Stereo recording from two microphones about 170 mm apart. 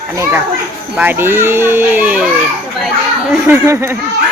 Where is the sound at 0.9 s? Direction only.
10° right (ahead or behind).